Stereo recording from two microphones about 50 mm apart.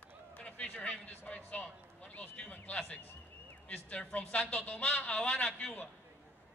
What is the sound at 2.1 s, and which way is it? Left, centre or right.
A woman's voice, left.